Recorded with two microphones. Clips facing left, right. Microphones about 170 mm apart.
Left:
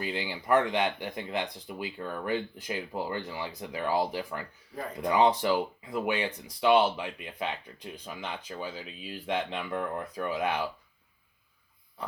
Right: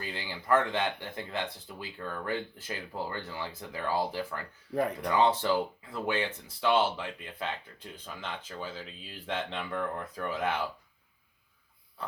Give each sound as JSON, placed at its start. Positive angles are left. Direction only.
{"t": 0.0, "sound": "speech", "side_deg": 15}
{"t": 4.7, "sound": "speech", "side_deg": -70}
{"t": 5.0, "sound": "speech", "side_deg": 15}